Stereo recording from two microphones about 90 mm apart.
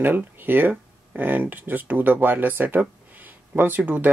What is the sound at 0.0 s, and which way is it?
Speech, 20° right (ahead or behind).